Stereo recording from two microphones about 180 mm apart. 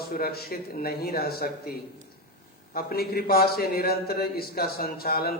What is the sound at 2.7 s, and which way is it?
A man's voice, 60° left (ahead or behind).